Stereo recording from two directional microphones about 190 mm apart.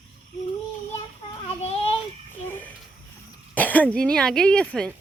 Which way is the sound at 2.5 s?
10° left (ahead or behind).